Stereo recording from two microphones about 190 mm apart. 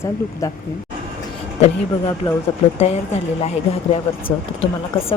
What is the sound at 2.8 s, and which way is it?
Speech, 35° left (ahead or behind).